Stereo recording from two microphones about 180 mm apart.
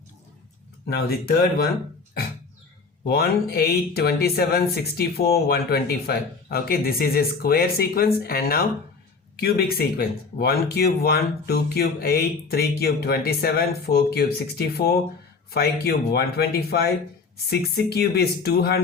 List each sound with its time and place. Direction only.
0.9 s speech: 60° left (ahead or behind)
3.1 s speech: 60° left (ahead or behind)